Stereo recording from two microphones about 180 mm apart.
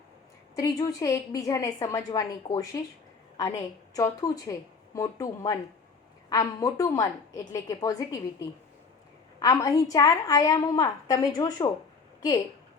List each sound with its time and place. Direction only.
0.5 s a woman's voice: 20° left (ahead or behind)